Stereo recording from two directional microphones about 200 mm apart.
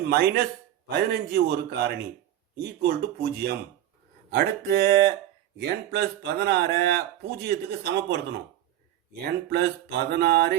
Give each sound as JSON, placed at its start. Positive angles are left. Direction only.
{"t": 0.0, "sound": "a man's voice", "side_deg": -50}